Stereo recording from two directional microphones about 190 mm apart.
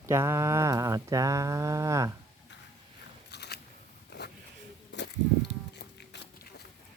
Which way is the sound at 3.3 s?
60° left (ahead or behind).